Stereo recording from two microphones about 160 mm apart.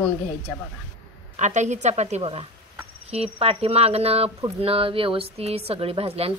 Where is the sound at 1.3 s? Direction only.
50° right (ahead or behind).